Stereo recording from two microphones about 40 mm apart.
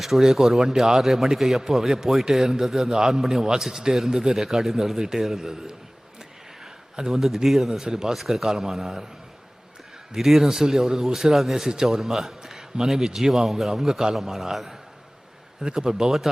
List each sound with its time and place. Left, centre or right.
0.0 s a man's voice: centre
7.1 s a man's voice: centre
7.9 s a man's voice: centre
8.1 s a man's voice: centre
10.2 s a man's voice: centre
15.6 s a man's voice: centre